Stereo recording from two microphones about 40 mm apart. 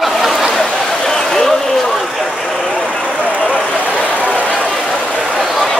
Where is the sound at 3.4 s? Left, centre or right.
Left.